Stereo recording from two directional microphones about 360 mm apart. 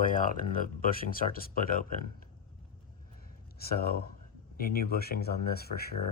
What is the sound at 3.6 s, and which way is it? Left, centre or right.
Speech, left.